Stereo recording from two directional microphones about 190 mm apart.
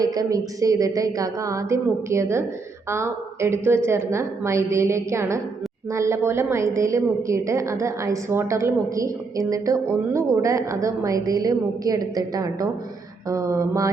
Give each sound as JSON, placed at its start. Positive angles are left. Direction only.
{"t": 0.0, "sound": "a woman's voice", "side_deg": -20}